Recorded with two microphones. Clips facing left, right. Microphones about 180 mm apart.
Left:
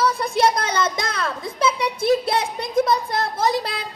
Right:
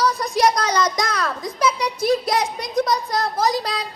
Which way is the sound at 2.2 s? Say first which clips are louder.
Right 1 dB; 30° left (ahead or behind).